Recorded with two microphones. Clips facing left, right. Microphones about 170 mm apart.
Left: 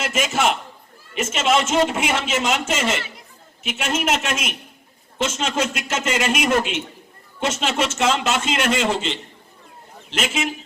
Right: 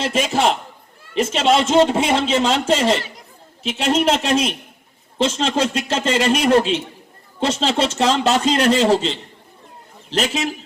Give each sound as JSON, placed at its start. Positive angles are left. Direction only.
{"t": 0.0, "sound": "a man's voice", "side_deg": -30}